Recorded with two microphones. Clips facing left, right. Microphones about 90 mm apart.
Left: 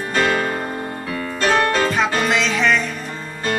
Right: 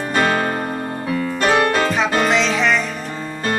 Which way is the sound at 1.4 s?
15° right (ahead or behind).